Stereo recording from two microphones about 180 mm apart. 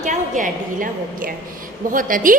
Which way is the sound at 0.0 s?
45° right (ahead or behind).